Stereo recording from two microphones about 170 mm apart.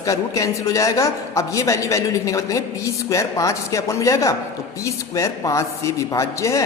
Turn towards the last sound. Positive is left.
turn(degrees=20)  # may be behind; listen again after turning